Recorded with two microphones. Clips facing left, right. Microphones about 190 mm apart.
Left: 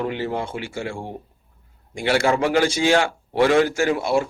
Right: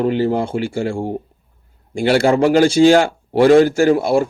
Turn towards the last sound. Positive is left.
turn(degrees=-50)  # may be behind; listen again after turning